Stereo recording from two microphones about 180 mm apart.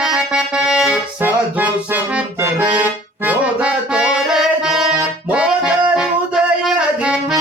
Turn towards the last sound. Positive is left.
turn(degrees=-5)  # may be behind; listen again after turning